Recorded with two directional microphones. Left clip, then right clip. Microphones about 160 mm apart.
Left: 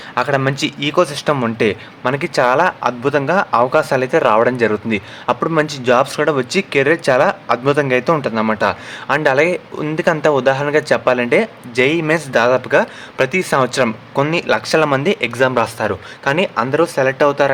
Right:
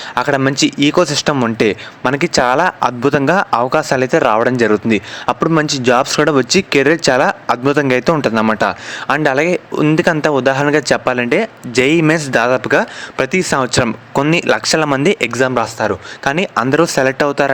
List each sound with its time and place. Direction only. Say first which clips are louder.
0.1 s speech: right 2 dB; 35° right (ahead or behind)
15.4 s speech: even; 20° right (ahead or behind)
16.2 s speech: right 1 dB; 40° right (ahead or behind)